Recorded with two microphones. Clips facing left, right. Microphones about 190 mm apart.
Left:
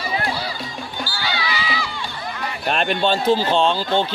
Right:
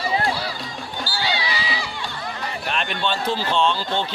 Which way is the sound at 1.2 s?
25° right (ahead or behind).